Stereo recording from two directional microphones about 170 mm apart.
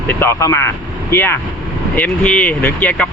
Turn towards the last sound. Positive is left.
turn(degrees=10)  # may be behind; listen again after turning